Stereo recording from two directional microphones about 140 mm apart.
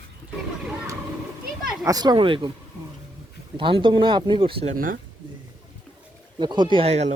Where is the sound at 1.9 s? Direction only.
30° right (ahead or behind).